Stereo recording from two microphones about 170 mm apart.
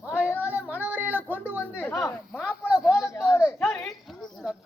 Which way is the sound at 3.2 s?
15° left (ahead or behind).